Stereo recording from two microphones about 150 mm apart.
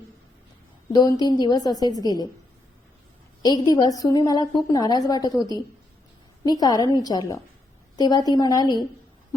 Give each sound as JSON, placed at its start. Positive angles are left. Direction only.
{"t": 1.2, "sound": "a woman's voice", "side_deg": 25}
{"t": 3.4, "sound": "a woman's voice", "side_deg": 25}